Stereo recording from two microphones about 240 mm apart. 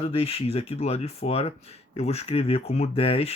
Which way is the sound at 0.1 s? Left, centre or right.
Left.